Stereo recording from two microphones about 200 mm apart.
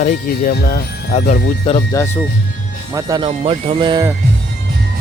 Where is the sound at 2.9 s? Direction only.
20° right (ahead or behind).